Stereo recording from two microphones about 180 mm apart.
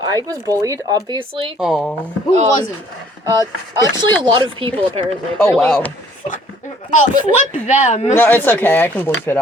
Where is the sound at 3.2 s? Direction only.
20° right (ahead or behind).